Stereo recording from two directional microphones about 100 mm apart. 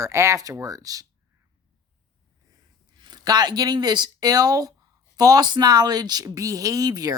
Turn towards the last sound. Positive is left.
turn(degrees=-40)  # may be behind; listen again after turning